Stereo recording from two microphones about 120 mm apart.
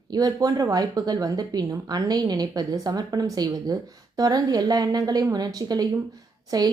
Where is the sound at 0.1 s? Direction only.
35° right (ahead or behind).